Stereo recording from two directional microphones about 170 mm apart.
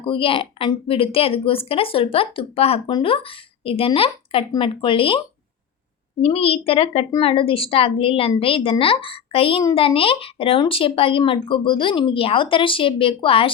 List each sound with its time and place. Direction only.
0.0 s a woman's voice: 30° left (ahead or behind)
6.2 s a woman's voice: 35° left (ahead or behind)